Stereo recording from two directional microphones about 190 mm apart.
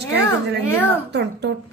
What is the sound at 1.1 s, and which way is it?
Speech, 65° right (ahead or behind).